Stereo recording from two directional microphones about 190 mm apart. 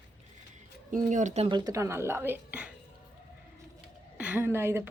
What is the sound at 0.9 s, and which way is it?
A woman's voice, 40° right (ahead or behind).